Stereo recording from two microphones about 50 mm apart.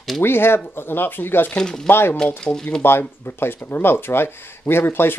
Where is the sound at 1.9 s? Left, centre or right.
Left.